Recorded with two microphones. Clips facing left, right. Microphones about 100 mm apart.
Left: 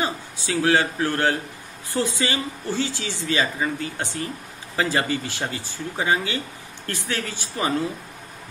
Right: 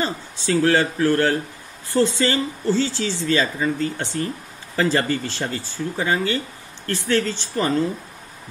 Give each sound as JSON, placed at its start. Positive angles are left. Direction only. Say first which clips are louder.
{"t": 0.0, "sound": "speech", "louder": "right 2 dB", "side_deg": 15}